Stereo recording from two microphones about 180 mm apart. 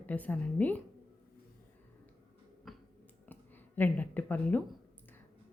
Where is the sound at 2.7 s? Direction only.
Centre (ahead or behind).